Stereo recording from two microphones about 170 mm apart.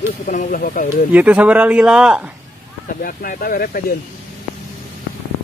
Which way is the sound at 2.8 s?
60° left (ahead or behind).